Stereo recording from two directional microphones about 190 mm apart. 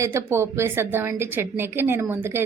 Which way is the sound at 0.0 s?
15° right (ahead or behind).